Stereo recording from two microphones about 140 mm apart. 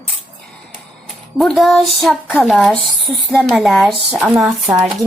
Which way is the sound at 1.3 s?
Centre (ahead or behind).